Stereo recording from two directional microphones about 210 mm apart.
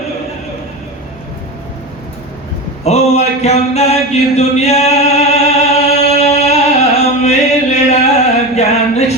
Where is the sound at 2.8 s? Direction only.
30° left (ahead or behind).